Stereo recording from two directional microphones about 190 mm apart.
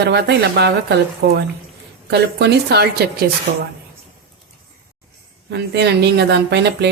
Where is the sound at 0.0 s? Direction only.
60° right (ahead or behind).